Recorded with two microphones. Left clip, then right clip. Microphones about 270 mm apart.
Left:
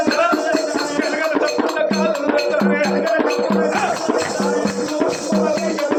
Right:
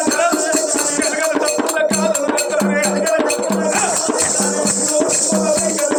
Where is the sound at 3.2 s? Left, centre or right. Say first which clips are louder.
Even; centre.